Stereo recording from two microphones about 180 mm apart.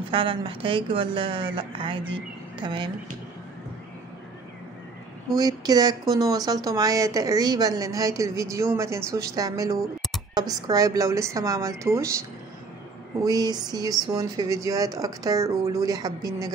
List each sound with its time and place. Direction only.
0.1 s speech: 30° right (ahead or behind)
5.3 s a woman's voice: 20° right (ahead or behind)
13.2 s speech: 20° right (ahead or behind)